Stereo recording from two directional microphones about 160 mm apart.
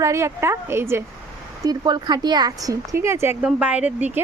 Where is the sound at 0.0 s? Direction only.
20° right (ahead or behind).